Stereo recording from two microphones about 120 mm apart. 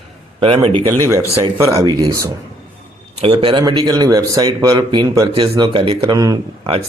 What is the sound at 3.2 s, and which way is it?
Speech, 50° right (ahead or behind).